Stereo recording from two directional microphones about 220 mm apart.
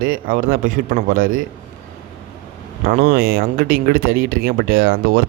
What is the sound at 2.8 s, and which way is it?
Speech, 40° right (ahead or behind).